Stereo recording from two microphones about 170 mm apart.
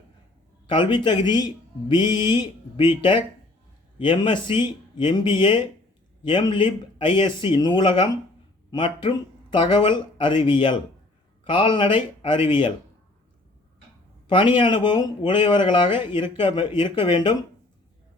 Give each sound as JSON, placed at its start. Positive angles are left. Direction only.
{"t": 0.7, "sound": "speech", "side_deg": 30}
{"t": 3.9, "sound": "speech", "side_deg": 30}
{"t": 14.3, "sound": "speech", "side_deg": 30}